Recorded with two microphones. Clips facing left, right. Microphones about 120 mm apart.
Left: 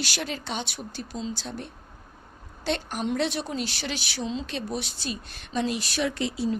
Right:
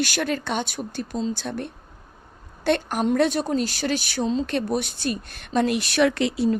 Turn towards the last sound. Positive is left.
turn(degrees=-70)  # may be behind; listen again after turning